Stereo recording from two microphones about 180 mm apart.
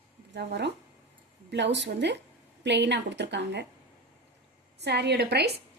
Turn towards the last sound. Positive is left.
turn(degrees=-65)  # may be behind; listen again after turning